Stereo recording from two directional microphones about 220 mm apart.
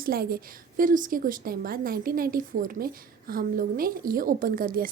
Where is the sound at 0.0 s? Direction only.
45° right (ahead or behind).